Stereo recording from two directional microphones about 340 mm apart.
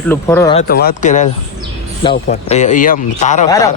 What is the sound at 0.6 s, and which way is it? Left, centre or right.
Speech, left.